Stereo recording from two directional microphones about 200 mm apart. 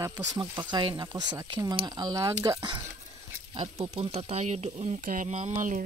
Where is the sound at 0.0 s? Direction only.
15° right (ahead or behind).